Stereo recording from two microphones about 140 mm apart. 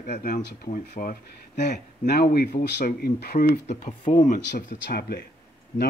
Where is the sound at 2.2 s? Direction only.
90° left; by 3.9 s 75° left (ahead or behind).